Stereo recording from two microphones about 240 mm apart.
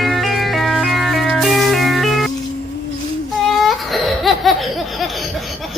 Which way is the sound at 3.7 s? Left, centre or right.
Centre.